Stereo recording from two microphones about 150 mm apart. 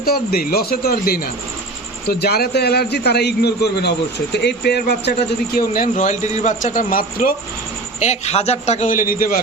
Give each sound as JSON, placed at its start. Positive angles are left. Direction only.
{"t": 0.0, "sound": "a man's voice", "side_deg": 90}
{"t": 5.5, "sound": "a man's voice", "side_deg": 70}
{"t": 7.9, "sound": "a man's voice", "side_deg": 50}